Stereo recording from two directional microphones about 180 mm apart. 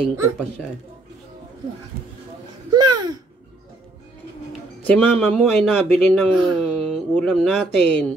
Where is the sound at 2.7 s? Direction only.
20° right (ahead or behind).